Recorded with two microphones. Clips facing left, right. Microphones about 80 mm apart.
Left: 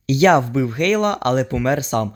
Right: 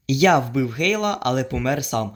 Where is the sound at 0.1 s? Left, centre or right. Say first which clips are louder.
Left 3 dB; left.